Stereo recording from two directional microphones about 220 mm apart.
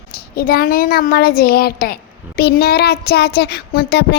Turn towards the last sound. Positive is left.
turn(degrees=45)  # may be behind; listen again after turning